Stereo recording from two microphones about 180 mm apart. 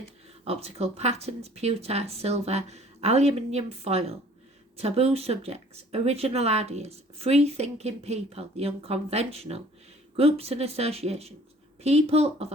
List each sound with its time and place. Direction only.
0.4 s speech: 35° right (ahead or behind)